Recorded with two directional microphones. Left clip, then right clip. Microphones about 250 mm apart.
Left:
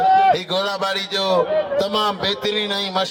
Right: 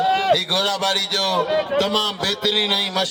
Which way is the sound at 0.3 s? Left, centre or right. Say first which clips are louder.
Right 2 dB; right.